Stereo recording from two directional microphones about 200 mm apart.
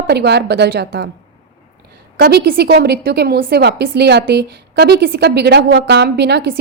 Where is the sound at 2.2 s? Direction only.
50° right (ahead or behind).